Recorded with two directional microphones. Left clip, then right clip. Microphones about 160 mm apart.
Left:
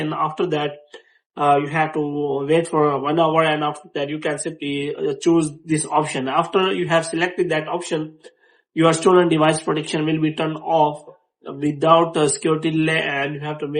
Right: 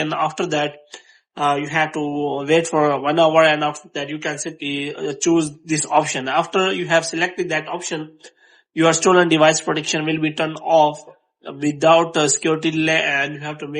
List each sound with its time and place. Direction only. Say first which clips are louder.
0.0 s speech: right 1 dB; 40° right (ahead or behind)